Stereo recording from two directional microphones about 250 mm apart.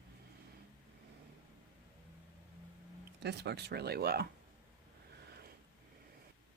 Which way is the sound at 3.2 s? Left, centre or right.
Right.